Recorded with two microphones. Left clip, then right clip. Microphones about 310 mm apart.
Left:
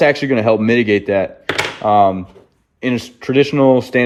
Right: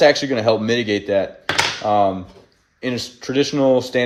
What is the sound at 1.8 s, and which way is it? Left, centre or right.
Speech, left.